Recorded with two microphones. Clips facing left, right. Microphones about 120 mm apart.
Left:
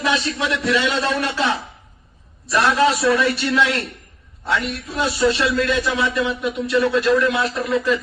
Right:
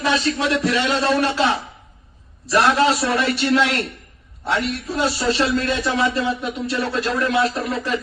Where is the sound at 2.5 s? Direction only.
35° right (ahead or behind).